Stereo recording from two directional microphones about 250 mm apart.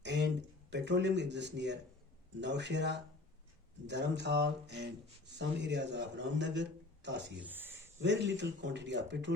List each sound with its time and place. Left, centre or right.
0.0 s a sound: right
0.7 s a man's voice: right
7.3 s speech: centre
8.0 s a man's voice: right